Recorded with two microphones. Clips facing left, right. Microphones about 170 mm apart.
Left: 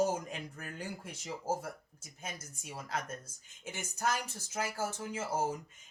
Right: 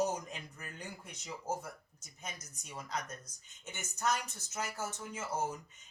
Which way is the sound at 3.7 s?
30° left (ahead or behind).